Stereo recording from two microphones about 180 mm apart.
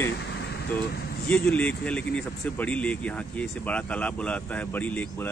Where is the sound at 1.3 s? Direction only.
5° left (ahead or behind).